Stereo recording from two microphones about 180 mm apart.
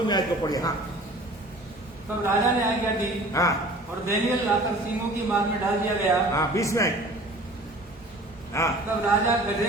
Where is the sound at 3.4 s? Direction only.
15° left (ahead or behind).